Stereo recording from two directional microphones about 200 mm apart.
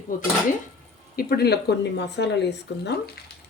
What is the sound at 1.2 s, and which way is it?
Speech, 50° left (ahead or behind).